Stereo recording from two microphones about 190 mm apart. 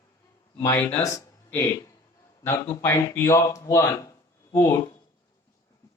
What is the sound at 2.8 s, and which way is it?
Speech, 15° left (ahead or behind).